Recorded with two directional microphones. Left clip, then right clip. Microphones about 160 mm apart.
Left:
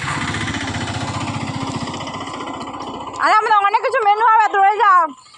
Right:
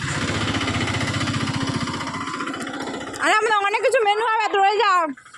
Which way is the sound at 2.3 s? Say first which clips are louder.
Even; 90° right.